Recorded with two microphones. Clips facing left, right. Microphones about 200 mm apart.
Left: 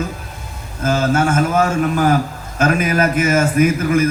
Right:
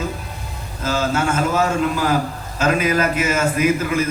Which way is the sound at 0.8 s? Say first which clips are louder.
Left 4 dB; 50° left (ahead or behind).